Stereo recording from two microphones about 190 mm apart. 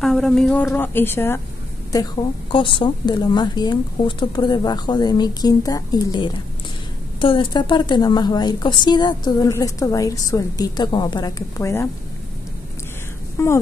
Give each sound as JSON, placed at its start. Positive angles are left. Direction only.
{"t": 0.0, "sound": "a woman's voice", "side_deg": 0}
{"t": 13.4, "sound": "a woman's voice", "side_deg": 15}